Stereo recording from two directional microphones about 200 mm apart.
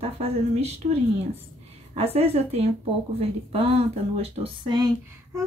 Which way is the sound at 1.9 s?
30° right (ahead or behind).